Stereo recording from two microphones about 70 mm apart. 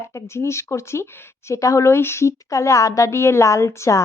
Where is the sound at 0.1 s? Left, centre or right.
Left.